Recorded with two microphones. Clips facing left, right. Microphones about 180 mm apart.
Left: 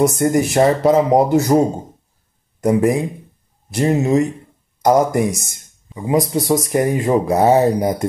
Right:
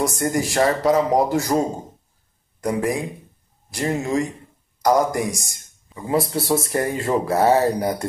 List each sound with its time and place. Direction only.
0.0 s speech: 20° left (ahead or behind)
2.6 s speech: 25° left (ahead or behind)